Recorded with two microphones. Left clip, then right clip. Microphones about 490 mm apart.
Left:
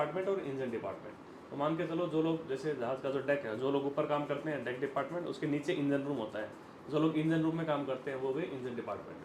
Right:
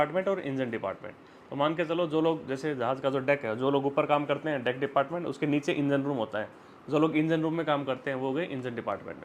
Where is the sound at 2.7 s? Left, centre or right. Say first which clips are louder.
Right 7 dB; right.